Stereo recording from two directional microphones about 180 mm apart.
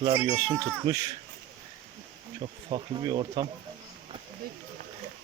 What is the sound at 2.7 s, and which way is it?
Speech, 30° right (ahead or behind).